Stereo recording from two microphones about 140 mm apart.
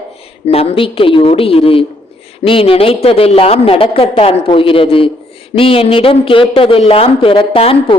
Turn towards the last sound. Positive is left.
turn(degrees=40)  # may be behind; listen again after turning